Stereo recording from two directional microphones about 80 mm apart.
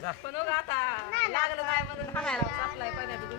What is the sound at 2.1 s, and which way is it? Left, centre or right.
Speech, centre.